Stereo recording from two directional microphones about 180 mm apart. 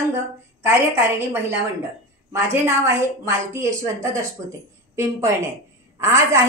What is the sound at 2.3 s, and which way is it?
A woman's voice, 15° right (ahead or behind).